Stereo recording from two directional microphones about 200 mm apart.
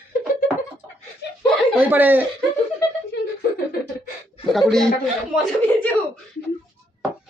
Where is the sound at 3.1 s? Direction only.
55° left (ahead or behind).